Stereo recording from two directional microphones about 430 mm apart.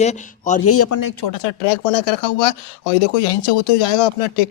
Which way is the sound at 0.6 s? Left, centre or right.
Left.